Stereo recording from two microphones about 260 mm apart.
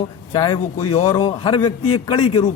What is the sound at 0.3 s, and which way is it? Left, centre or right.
Speech, centre.